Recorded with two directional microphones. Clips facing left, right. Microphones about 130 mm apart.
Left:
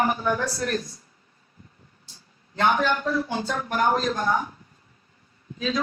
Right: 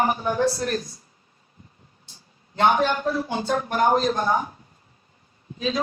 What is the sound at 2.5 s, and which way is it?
A woman's voice, 25° right (ahead or behind).